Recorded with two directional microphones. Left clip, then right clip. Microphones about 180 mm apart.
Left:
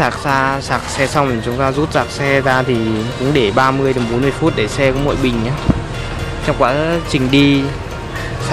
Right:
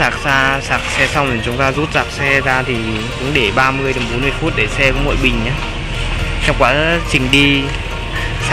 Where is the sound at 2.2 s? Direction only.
20° left (ahead or behind).